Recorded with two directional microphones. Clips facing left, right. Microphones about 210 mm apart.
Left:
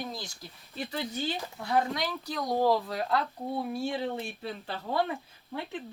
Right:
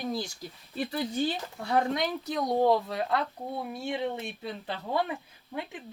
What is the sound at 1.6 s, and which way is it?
Speech, 25° right (ahead or behind).